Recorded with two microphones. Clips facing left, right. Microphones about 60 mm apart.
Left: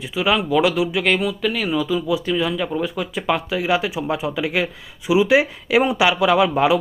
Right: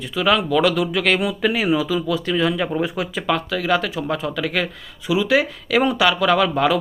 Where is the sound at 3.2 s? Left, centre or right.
Centre.